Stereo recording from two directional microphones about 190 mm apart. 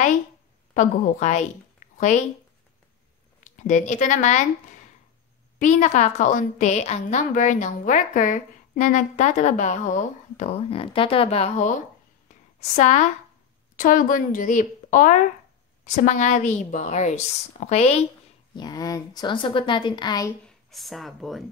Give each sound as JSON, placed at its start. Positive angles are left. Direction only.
{"t": 0.7, "sound": "a woman's voice", "side_deg": 40}
{"t": 3.5, "sound": "a woman's voice", "side_deg": 40}
{"t": 5.6, "sound": "a woman's voice", "side_deg": 40}
{"t": 18.5, "sound": "speech", "side_deg": 20}
{"t": 20.4, "sound": "speech", "side_deg": 0}